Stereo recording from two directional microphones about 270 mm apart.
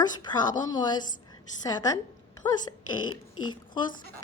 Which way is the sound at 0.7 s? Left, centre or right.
Centre.